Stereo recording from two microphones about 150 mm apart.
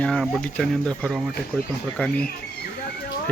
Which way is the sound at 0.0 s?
5° left (ahead or behind).